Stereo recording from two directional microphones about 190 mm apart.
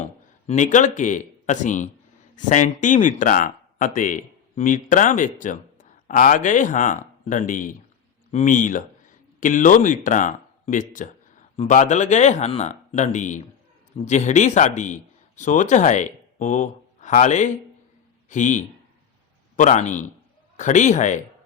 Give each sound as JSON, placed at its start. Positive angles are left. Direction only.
{"t": 0.0, "sound": "speech", "side_deg": 40}